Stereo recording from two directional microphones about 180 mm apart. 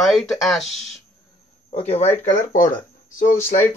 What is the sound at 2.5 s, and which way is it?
Speech, 50° left (ahead or behind).